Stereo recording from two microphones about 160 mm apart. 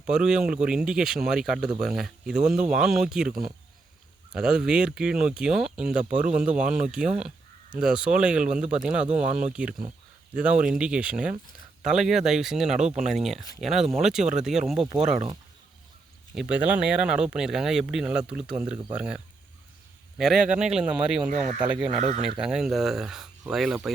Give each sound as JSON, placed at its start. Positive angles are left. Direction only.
{"t": 0.0, "sound": "speech", "side_deg": -5}
{"t": 4.4, "sound": "speech", "side_deg": -5}
{"t": 15.1, "sound": "speech", "side_deg": -35}
{"t": 16.3, "sound": "speech", "side_deg": -5}